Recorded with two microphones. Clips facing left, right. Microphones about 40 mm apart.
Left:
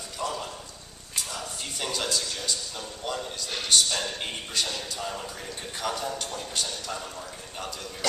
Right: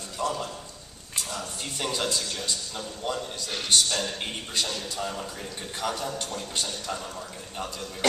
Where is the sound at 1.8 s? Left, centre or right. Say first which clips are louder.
Right 1 dB; centre.